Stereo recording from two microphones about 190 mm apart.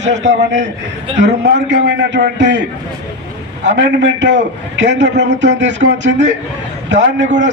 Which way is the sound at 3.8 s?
70° right (ahead or behind).